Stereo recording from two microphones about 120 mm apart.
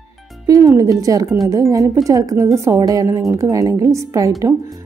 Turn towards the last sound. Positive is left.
turn(degrees=-30)  # may be behind; listen again after turning